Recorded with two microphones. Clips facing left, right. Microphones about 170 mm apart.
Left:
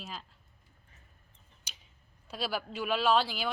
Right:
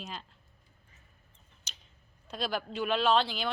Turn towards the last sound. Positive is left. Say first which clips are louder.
# right 1 dB
turn(degrees=5)  # may be behind; listen again after turning